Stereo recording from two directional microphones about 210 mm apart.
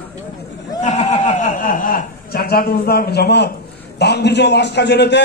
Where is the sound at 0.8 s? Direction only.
30° left (ahead or behind); by 3.5 s 50° left (ahead or behind).